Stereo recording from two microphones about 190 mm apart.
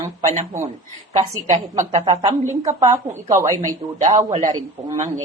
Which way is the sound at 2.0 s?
25° right (ahead or behind).